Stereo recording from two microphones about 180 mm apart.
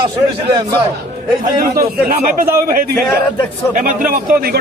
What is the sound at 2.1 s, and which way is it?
Speech, 50° right (ahead or behind).